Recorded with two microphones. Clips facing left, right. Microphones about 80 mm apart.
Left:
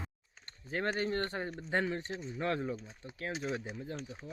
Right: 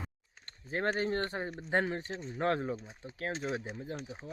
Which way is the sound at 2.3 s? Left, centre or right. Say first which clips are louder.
Right 4 dB; right.